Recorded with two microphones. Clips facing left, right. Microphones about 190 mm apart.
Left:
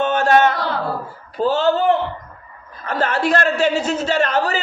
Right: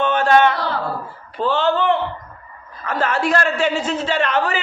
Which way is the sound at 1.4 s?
40° left (ahead or behind).